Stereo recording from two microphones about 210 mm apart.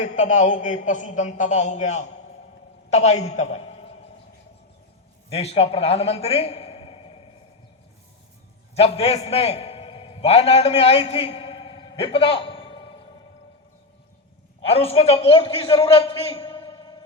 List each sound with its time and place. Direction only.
0.0 s a man's voice: 35° left (ahead or behind)
5.3 s a man's voice: 30° left (ahead or behind)
8.7 s a man's voice: 30° left (ahead or behind)
14.6 s a man's voice: 25° left (ahead or behind)